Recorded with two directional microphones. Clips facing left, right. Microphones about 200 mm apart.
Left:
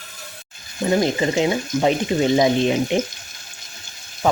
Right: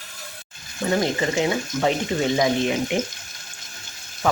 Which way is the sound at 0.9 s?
20° left (ahead or behind).